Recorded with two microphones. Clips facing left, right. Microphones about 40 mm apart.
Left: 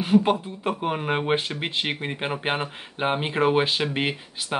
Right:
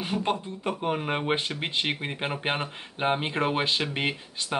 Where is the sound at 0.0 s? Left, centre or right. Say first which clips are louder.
Left 8 dB; centre.